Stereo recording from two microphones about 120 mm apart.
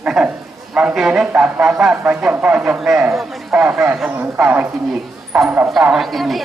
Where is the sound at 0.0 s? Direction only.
5° right (ahead or behind).